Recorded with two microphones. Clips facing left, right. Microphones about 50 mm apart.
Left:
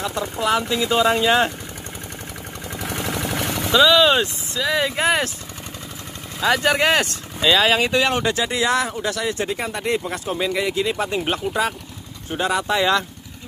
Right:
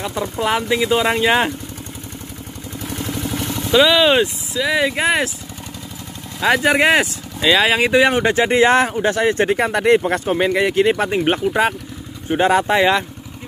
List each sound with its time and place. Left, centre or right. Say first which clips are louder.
0.0 s speech: right 2 dB; centre
2.9 s vehicle: right 1 dB; left
3.7 s speech: right 2 dB; centre
6.4 s speech: right 3 dB; centre
8.2 s speech: right 7 dB; right
9.5 s speech: right 9 dB; right
11.1 s speech: right 5 dB; right